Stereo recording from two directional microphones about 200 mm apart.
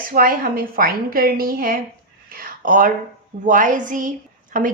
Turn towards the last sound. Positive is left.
turn(degrees=-40)  # may be behind; listen again after turning